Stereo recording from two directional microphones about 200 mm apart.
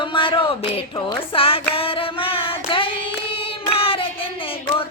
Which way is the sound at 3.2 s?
25° left (ahead or behind).